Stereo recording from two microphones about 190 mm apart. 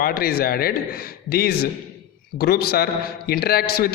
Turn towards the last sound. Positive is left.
turn(degrees=55)  # may be behind; listen again after turning